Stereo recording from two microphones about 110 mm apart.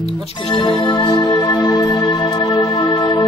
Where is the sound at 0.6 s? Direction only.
45° left (ahead or behind).